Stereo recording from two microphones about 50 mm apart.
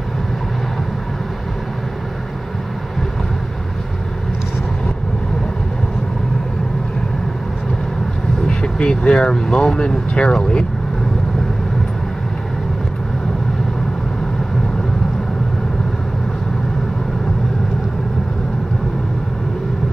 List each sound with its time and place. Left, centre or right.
8.5 s speech: centre